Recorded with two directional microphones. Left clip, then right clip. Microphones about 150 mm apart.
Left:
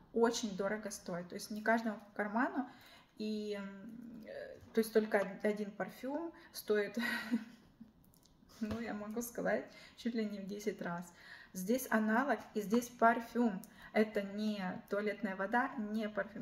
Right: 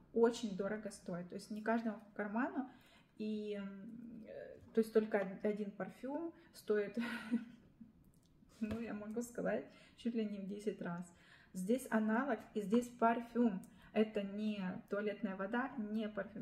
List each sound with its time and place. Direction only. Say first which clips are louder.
0.2 s speech: left 1 dB; 5° right (ahead or behind)
4.3 s a sound: left 4 dB; 5° right (ahead or behind)
5.4 s speech: left 3 dB; centre (ahead or behind)
8.8 s speech: left 2 dB; 5° right (ahead or behind)